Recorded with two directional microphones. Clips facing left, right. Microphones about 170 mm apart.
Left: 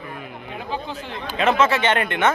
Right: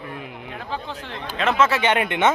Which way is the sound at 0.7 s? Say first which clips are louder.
Left 2 dB; 5° left (ahead or behind).